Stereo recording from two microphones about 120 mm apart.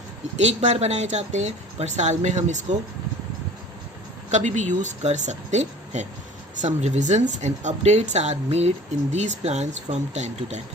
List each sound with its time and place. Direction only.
0.3 s speech: 70° right (ahead or behind)
4.3 s speech: 80° right